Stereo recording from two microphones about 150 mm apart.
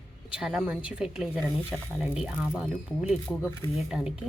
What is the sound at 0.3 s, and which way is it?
Speech, 5° right (ahead or behind).